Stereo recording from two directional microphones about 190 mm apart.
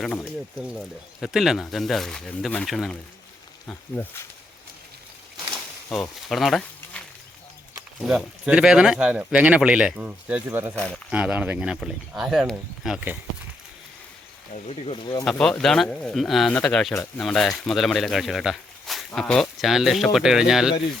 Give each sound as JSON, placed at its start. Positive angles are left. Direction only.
{"t": 0.0, "sound": "speech", "side_deg": 5}
{"t": 5.5, "sound": "a sound", "side_deg": 0}
{"t": 8.0, "sound": "speech", "side_deg": -5}
{"t": 10.8, "sound": "speech", "side_deg": 5}
{"t": 11.1, "sound": "speech", "side_deg": -5}
{"t": 14.5, "sound": "speech", "side_deg": 30}
{"t": 15.2, "sound": "speech", "side_deg": 5}